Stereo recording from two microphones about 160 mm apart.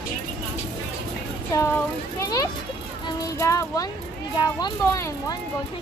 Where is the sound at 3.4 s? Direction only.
20° left (ahead or behind).